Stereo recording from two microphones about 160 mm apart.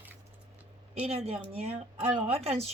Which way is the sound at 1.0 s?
40° right (ahead or behind).